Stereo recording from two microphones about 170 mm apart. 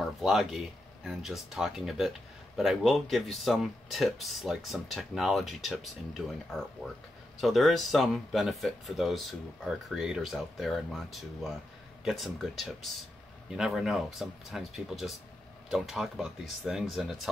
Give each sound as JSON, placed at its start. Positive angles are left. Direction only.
{"t": 0.2, "sound": "speech", "side_deg": 0}